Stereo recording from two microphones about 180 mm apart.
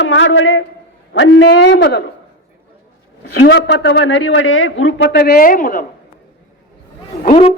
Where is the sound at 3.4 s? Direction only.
70° left (ahead or behind); by 5.8 s 50° left (ahead or behind).